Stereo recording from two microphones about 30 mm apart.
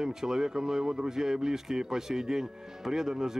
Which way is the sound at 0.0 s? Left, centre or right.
Centre.